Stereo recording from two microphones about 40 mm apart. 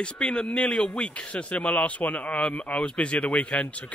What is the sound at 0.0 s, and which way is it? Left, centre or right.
A man's voice, left.